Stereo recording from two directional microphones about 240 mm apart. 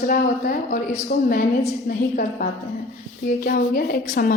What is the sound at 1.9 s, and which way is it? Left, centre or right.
A woman's voice, left.